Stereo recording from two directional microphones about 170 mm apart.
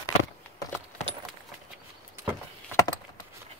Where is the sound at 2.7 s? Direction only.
20° left (ahead or behind).